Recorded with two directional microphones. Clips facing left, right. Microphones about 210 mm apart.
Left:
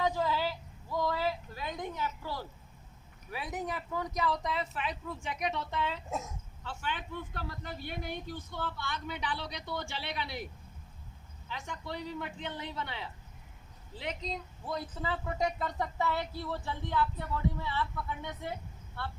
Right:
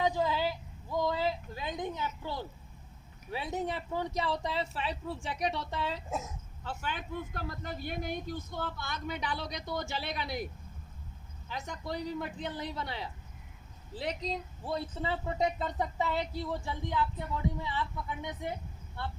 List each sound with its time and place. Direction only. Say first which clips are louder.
0.0 s a sound: right 1 dB; 20° right (ahead or behind)
3.2 s speech: right 3 dB; 25° right (ahead or behind)
6.1 s speech: right 1 dB; centre (ahead or behind)
6.7 s speech: right 1 dB; 40° right (ahead or behind); by 19.1 s 15° right (ahead or behind)